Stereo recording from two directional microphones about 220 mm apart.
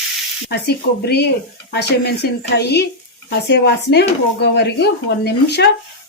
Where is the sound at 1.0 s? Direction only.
45° left (ahead or behind).